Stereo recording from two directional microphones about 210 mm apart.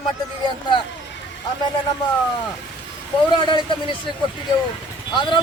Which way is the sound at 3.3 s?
20° left (ahead or behind).